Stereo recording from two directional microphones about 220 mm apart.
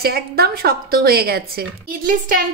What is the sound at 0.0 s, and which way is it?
A woman's voice, 45° right (ahead or behind).